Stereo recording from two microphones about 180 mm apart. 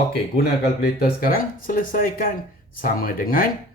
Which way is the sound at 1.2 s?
50° left (ahead or behind).